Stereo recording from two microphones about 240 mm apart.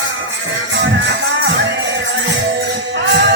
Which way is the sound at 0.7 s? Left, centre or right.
Right.